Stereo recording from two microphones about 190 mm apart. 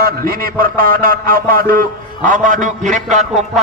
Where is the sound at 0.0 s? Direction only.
50° right (ahead or behind).